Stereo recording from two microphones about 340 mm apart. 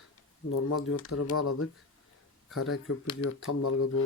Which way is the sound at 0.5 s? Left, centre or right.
Left.